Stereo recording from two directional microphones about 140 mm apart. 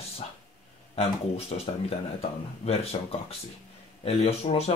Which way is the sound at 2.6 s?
45° left (ahead or behind).